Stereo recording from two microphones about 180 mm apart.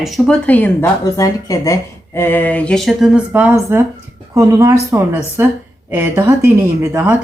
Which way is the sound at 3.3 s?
10° right (ahead or behind).